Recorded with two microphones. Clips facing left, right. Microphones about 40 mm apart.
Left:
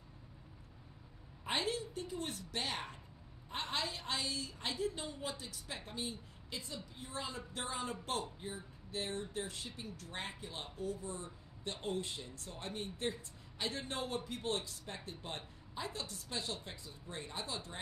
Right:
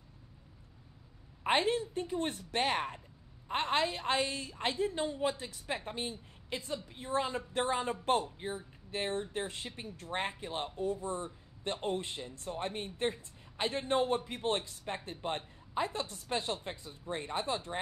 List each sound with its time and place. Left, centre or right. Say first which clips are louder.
1.4 s speech: right 8 dB; right